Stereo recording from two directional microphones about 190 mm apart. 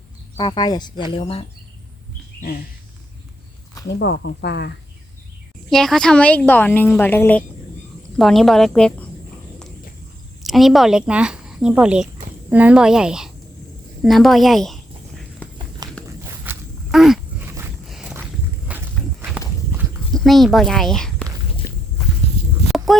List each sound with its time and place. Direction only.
0.3 s speech: 25° left (ahead or behind)
3.8 s speech: 65° left (ahead or behind)
5.7 s a woman's voice: centre (ahead or behind)
10.4 s a woman's voice: centre (ahead or behind)
16.0 s dog: 10° right (ahead or behind)
17.8 s walk: 5° right (ahead or behind)
20.1 s speech: centre (ahead or behind)
22.9 s music: centre (ahead or behind)